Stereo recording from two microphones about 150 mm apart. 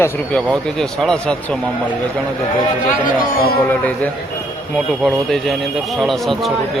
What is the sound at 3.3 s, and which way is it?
Speech, 80° left.